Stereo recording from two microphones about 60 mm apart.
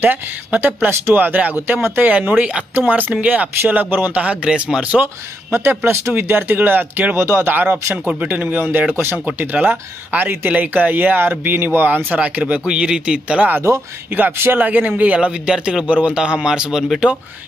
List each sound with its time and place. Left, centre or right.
0.0 s speech: right
5.0 s speech: right
7.2 s speech: right
7.5 s speech: right
8.0 s speech: right
12.6 s speech: centre
14.1 s speech: right
15.1 s speech: centre